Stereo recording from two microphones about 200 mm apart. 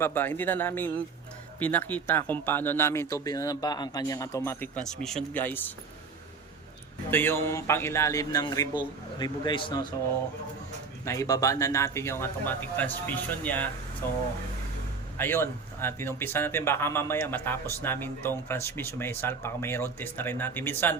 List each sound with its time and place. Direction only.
0.0 s speech: 10° left (ahead or behind)
7.1 s a man's voice: 10° left (ahead or behind)
11.0 s speech: 15° left (ahead or behind)
15.2 s speech: 10° left (ahead or behind)